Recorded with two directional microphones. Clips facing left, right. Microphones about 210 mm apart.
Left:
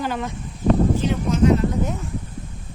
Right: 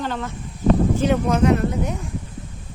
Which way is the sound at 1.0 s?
60° right (ahead or behind).